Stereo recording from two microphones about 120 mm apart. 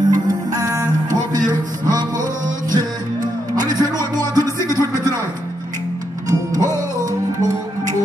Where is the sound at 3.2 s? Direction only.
35° right (ahead or behind).